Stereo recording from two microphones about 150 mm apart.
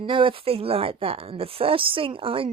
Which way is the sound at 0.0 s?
35° right (ahead or behind).